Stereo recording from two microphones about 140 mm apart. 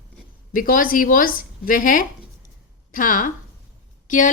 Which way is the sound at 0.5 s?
90° left.